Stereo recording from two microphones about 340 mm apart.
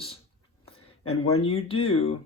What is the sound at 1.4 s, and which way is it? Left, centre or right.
Speech, centre.